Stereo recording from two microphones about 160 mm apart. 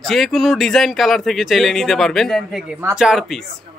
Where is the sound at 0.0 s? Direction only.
Centre (ahead or behind).